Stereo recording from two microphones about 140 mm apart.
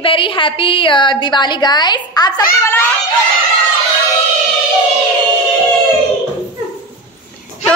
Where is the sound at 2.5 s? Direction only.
15° left (ahead or behind).